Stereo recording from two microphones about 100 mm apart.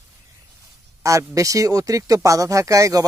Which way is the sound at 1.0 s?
35° right (ahead or behind).